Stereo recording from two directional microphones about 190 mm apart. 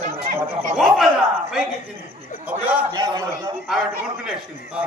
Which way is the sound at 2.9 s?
20° right (ahead or behind).